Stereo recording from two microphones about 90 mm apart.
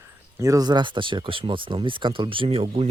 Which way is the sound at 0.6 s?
55° right (ahead or behind).